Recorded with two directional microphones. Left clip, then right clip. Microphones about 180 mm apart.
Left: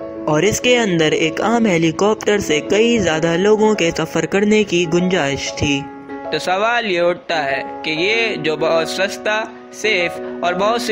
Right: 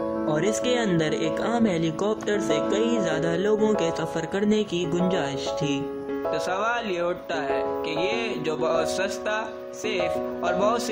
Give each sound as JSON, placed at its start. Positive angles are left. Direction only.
{"t": 0.3, "sound": "speech", "side_deg": 20}